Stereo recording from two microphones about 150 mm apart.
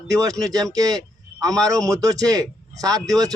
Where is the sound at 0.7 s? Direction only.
25° right (ahead or behind).